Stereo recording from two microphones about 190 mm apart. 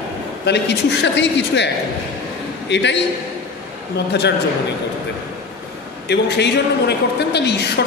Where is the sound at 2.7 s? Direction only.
65° left (ahead or behind).